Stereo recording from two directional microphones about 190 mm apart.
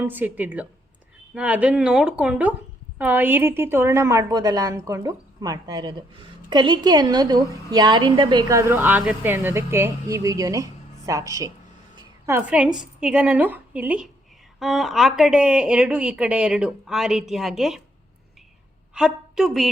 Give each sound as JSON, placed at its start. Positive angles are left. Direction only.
{"t": 0.0, "sound": "a woman's voice", "side_deg": -10}
{"t": 11.9, "sound": "a sound", "side_deg": -15}
{"t": 12.8, "sound": "a woman's voice", "side_deg": -5}
{"t": 18.9, "sound": "a woman's voice", "side_deg": -5}